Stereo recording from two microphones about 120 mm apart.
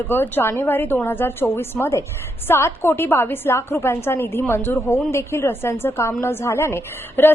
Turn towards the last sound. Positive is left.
turn(degrees=20)  # may be behind; listen again after turning